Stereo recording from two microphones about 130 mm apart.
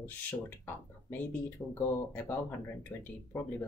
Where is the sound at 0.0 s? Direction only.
15° left (ahead or behind).